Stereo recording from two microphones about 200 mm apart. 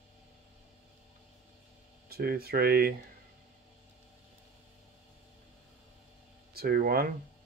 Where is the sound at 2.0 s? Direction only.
50° right (ahead or behind).